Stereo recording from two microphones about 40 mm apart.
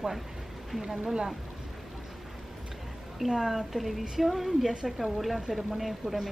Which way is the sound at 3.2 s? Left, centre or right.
Centre.